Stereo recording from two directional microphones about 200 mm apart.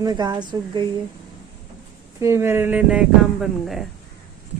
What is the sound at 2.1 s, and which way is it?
Speech, 15° right (ahead or behind).